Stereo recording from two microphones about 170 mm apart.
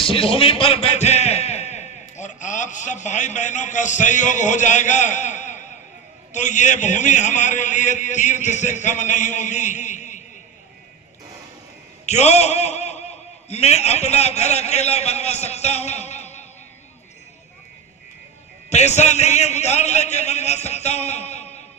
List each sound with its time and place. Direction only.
0.0 s a man's voice: 30° left (ahead or behind)
12.0 s a man's voice: 40° left (ahead or behind)
18.7 s a man's voice: 40° left (ahead or behind)